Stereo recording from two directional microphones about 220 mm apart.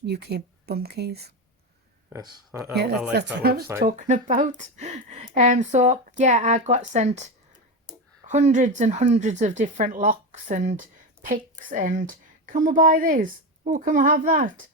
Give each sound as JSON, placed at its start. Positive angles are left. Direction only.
{"t": 0.0, "sound": "speech", "side_deg": -50}
{"t": 2.5, "sound": "speech", "side_deg": -10}
{"t": 3.3, "sound": "speech", "side_deg": -45}
{"t": 3.8, "sound": "speech", "side_deg": -35}
{"t": 8.3, "sound": "speech", "side_deg": -30}